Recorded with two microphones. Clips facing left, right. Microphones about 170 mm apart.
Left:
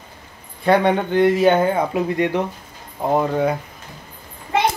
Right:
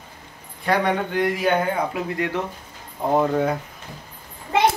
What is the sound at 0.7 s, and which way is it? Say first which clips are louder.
Speech: left 5 dB; 25° left (ahead or behind).